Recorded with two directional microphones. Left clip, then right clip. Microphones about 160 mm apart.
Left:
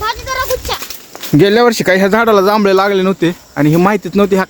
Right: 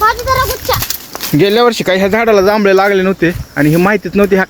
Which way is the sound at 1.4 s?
45° left (ahead or behind).